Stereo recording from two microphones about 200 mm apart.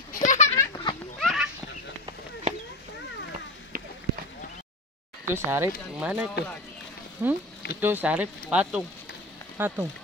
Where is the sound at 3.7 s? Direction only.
45° right (ahead or behind).